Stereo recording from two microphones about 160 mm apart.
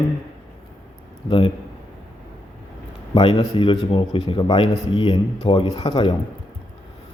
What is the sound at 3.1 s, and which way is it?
A man's voice, 30° left (ahead or behind).